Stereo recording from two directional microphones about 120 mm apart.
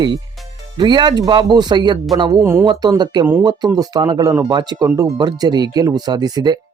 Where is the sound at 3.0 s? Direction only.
35° right (ahead or behind).